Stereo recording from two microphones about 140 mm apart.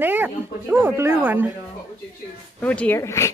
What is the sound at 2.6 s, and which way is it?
Speech, 10° left (ahead or behind).